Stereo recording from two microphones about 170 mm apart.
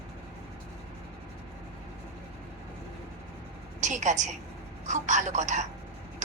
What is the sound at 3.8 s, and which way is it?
A woman's voice, 45° right (ahead or behind).